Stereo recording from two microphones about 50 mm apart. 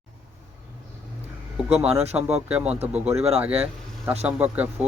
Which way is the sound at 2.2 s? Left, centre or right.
Right.